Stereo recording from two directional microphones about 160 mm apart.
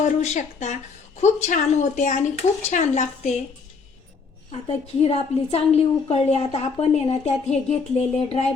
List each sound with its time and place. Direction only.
0.0 s speech: 45° left (ahead or behind)
5.0 s a woman's voice: 40° left (ahead or behind)